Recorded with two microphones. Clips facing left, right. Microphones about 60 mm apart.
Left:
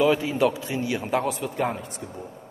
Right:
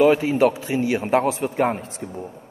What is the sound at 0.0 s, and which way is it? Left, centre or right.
A woman's voice, right.